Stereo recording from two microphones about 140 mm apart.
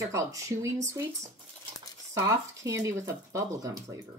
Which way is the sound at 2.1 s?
25° right (ahead or behind).